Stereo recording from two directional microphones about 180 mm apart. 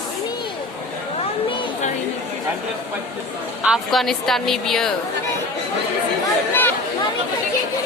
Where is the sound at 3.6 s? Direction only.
Centre (ahead or behind).